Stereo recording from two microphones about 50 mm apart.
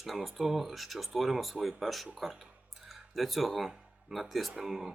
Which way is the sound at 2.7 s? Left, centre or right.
Centre.